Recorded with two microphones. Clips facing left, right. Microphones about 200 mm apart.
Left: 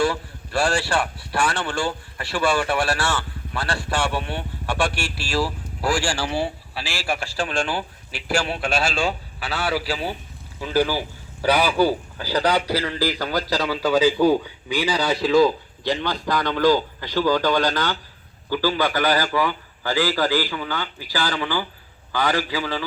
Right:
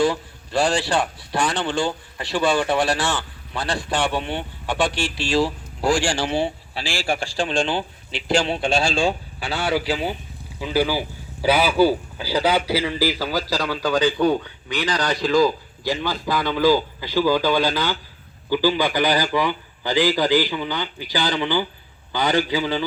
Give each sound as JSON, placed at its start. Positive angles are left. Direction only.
{"t": 0.0, "sound": "a sound", "side_deg": -20}
{"t": 0.8, "sound": "speech", "side_deg": -20}
{"t": 4.9, "sound": "speech", "side_deg": 10}
{"t": 5.3, "sound": "a man's voice", "side_deg": -25}